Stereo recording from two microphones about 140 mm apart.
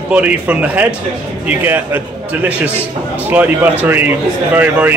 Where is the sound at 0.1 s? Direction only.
10° right (ahead or behind).